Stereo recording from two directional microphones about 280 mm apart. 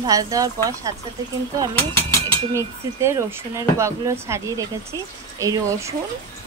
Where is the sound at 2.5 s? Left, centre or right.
Centre.